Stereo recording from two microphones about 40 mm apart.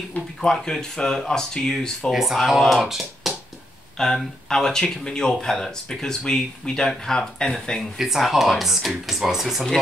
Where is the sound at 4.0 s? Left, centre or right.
Centre.